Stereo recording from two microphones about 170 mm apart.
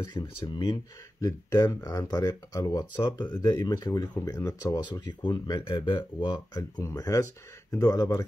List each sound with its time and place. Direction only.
0.0 s speech: 25° left (ahead or behind)